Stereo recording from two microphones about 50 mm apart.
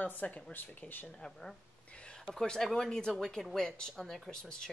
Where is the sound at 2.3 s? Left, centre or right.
Centre.